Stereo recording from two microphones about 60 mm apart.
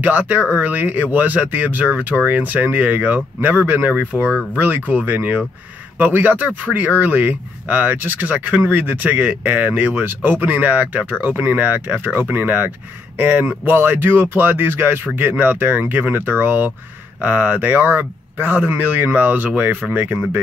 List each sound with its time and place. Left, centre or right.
0.0 s speech: right